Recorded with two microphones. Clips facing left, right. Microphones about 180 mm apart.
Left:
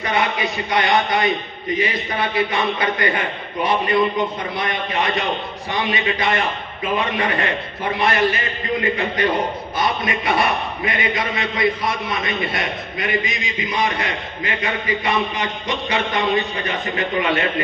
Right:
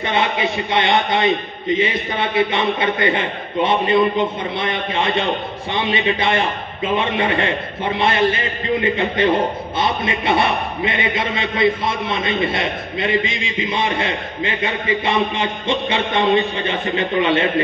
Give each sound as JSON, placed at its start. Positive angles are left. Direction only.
{"t": 0.0, "sound": "a man's voice", "side_deg": -25}